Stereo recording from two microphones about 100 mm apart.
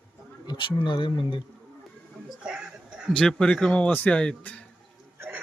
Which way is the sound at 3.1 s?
10° left (ahead or behind).